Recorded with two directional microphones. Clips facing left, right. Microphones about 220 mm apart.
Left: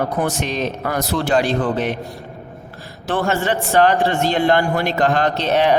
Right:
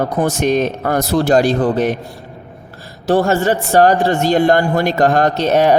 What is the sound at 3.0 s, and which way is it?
A man's voice, 40° right (ahead or behind).